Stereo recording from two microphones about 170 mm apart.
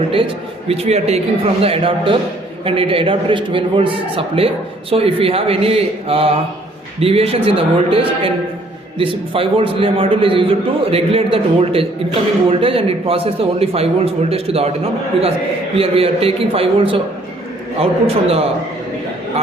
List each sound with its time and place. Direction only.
0.7 s a man's voice: 35° right (ahead or behind)
15.8 s a man's voice: 35° right (ahead or behind)